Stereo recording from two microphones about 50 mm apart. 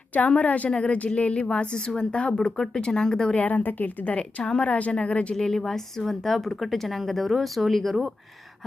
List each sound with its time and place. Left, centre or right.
0.1 s a woman's voice: left
3.4 s a woman's voice: left
5.3 s speech: centre